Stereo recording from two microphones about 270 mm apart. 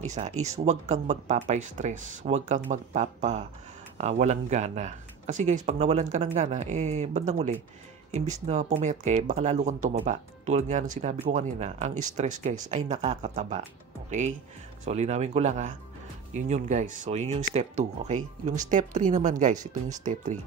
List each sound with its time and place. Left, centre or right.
0.4 s speech: right
14.9 s speech: right